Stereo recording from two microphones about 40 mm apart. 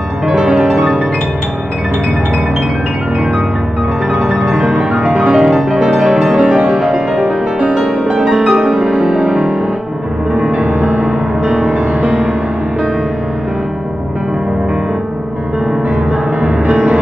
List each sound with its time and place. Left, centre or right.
0.3 s music: centre
4.1 s music: centre
4.6 s music: right
10.3 s music: right
16.4 s music: right